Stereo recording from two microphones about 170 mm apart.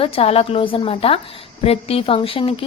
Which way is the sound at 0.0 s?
35° left (ahead or behind).